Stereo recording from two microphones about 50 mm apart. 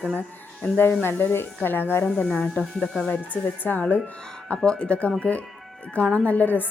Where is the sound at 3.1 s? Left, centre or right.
Left.